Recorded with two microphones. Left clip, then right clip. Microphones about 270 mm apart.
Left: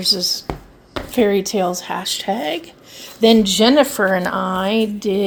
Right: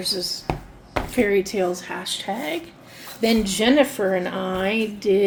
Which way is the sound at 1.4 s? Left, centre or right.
Left.